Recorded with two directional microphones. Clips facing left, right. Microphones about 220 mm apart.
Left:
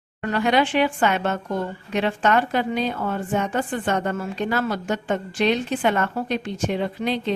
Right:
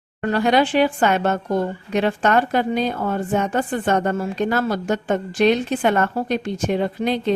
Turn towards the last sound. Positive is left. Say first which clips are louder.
# right 3 dB
turn(degrees=-45)  # may be behind; listen again after turning